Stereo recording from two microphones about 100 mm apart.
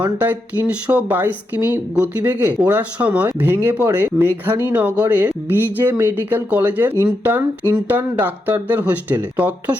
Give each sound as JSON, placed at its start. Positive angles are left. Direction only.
{"t": 0.2, "sound": "speech", "side_deg": -20}